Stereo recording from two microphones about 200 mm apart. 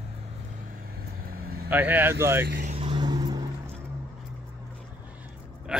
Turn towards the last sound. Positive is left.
turn(degrees=-5)  # may be behind; listen again after turning